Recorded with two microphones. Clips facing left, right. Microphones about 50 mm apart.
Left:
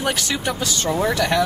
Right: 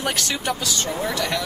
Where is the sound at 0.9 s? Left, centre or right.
Left.